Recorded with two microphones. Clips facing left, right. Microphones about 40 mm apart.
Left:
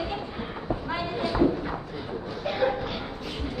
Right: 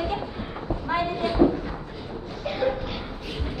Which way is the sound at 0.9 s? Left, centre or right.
Right.